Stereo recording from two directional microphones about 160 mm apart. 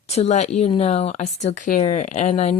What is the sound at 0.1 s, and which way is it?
Speech, 40° left (ahead or behind).